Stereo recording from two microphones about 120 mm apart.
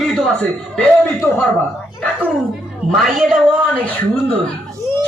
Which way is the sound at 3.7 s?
15° left (ahead or behind).